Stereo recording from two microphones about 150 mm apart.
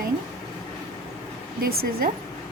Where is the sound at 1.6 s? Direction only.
85° right.